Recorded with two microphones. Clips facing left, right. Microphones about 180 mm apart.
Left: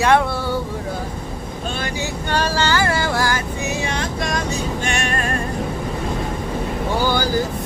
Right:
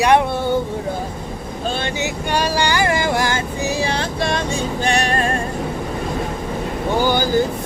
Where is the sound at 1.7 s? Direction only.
30° right (ahead or behind).